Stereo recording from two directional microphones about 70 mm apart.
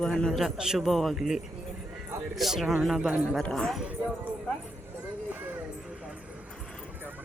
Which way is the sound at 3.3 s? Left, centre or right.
Centre.